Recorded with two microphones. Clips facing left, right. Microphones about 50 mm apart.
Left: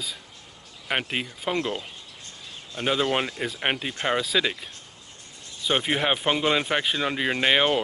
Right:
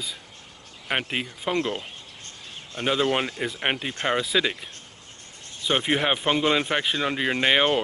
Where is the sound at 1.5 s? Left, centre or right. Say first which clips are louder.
Right 2 dB; right.